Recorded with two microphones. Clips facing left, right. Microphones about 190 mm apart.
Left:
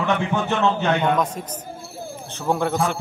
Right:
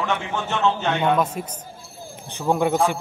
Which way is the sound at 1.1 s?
5° right (ahead or behind).